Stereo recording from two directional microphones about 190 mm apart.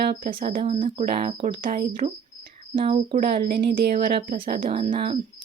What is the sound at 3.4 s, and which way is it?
Speech, 55° right (ahead or behind).